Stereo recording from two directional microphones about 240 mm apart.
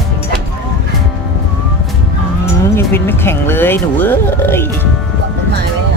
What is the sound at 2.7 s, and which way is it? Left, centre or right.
Speech, centre.